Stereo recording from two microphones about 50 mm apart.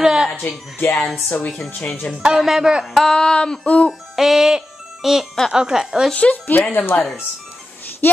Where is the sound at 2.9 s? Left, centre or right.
Centre.